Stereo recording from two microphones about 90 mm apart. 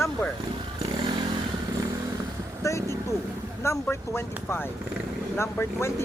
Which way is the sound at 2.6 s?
35° left (ahead or behind).